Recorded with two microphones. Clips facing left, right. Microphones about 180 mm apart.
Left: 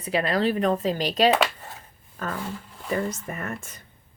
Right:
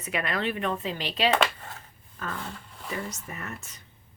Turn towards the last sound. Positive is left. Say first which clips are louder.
# left 6 dB
turn(degrees=50)  # may be behind; listen again after turning